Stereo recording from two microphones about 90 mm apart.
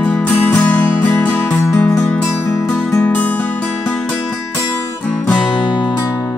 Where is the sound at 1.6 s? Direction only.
30° left (ahead or behind).